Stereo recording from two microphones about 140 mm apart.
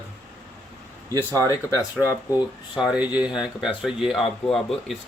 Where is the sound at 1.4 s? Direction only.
20° left (ahead or behind).